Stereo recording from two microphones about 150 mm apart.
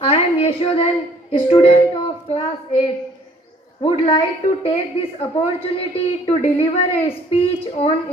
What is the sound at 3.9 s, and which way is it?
A woman's voice, 40° left (ahead or behind).